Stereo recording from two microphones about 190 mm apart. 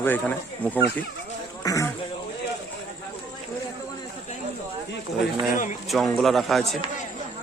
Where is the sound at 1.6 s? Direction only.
15° left (ahead or behind).